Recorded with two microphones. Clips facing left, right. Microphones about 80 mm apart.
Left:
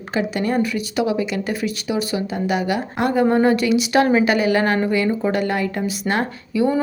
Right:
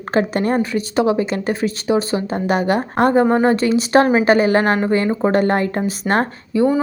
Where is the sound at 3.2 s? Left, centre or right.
Right.